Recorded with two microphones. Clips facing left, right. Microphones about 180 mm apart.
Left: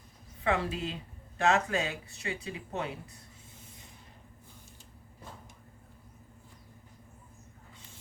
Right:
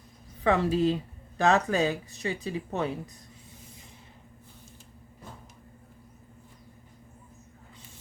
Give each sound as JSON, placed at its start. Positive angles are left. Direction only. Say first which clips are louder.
{"t": 0.4, "sound": "speech", "louder": "right 7 dB", "side_deg": -35}